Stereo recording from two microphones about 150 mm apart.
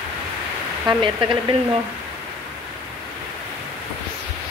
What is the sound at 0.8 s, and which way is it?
Speech, 30° right (ahead or behind).